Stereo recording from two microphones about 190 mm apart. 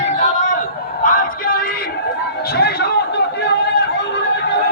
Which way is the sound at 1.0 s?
45° left (ahead or behind).